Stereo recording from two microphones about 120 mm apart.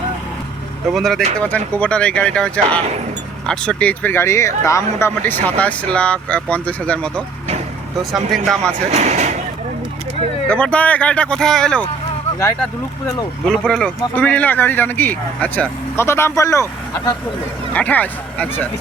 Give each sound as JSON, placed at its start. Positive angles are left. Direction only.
{"t": 0.9, "sound": "speech", "side_deg": 0}
{"t": 8.1, "sound": "speech", "side_deg": 0}
{"t": 8.9, "sound": "a sound", "side_deg": -70}
{"t": 10.5, "sound": "speech", "side_deg": 10}
{"t": 13.4, "sound": "speech", "side_deg": 0}
{"t": 17.7, "sound": "speech", "side_deg": 15}